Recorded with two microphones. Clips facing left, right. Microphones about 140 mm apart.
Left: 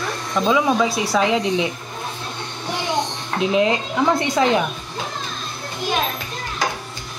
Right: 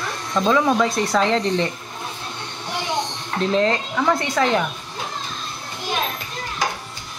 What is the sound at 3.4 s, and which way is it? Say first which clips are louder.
Speech: left 1 dB; 10° left (ahead or behind).